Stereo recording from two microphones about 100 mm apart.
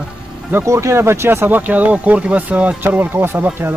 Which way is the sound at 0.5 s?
30° right (ahead or behind).